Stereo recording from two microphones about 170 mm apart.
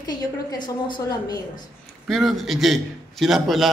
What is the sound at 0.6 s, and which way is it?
Speech, 25° left (ahead or behind).